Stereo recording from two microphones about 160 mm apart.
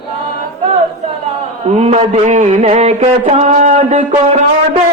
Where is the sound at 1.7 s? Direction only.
40° right (ahead or behind).